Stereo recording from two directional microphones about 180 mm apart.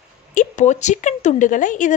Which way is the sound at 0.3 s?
45° left (ahead or behind).